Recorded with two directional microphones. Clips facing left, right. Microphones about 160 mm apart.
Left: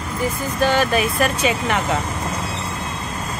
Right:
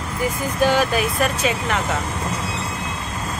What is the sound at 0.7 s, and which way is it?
Speech, 5° right (ahead or behind).